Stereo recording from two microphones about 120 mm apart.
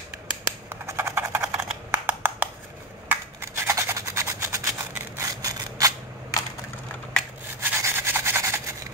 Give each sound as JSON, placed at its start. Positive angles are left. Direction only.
{"t": 0.7, "sound": "typing", "side_deg": -20}
{"t": 1.9, "sound": "a sound", "side_deg": -15}
{"t": 3.1, "sound": "rub", "side_deg": -20}
{"t": 7.6, "sound": "rub", "side_deg": -20}